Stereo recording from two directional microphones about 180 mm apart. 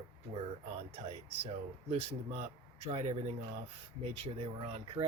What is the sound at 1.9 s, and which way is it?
Speech, 35° right (ahead or behind).